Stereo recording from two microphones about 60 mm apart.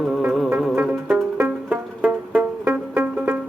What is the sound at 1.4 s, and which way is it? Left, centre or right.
Music, right.